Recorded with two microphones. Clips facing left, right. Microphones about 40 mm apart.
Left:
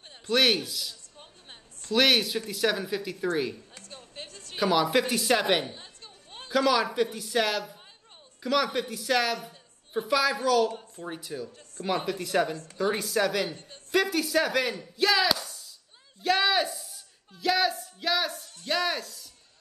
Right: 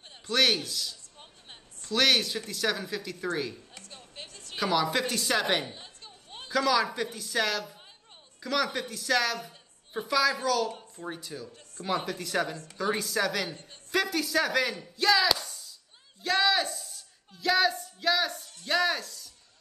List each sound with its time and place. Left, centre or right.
0.3 s speech: centre
2.0 s speech: centre
3.7 s a sound: left
4.6 s speech: centre
11.8 s speech: left
12.2 s speech: centre
13.5 s a man's voice: left
14.1 s speech: centre